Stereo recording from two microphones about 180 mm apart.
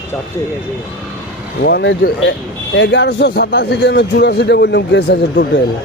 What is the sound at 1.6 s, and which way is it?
A man's voice, 70° left (ahead or behind).